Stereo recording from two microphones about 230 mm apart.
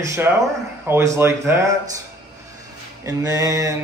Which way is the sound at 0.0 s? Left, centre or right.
Centre.